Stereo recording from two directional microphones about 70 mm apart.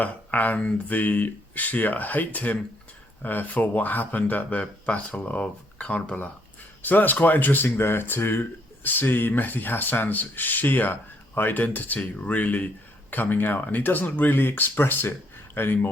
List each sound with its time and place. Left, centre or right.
0.0 s speech: left